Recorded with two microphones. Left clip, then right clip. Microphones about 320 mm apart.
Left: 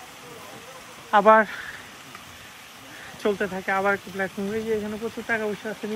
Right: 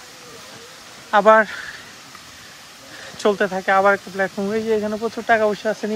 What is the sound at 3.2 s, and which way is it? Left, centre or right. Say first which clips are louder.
Speech: right 7 dB; centre.